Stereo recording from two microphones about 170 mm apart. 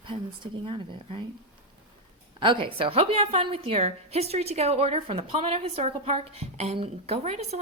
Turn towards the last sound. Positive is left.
turn(degrees=-40)  # may be behind; listen again after turning